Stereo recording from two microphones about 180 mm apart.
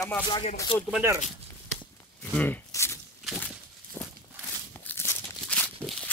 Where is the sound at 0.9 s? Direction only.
15° right (ahead or behind).